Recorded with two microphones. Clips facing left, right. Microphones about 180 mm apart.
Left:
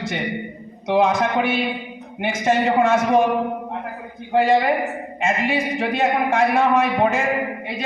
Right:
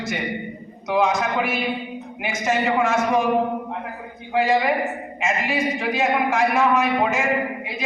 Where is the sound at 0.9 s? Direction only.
30° left (ahead or behind).